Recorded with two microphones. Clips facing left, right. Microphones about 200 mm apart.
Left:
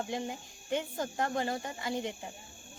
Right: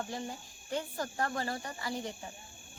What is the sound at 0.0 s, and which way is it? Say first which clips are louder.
Speech: left 3 dB; 20° left (ahead or behind).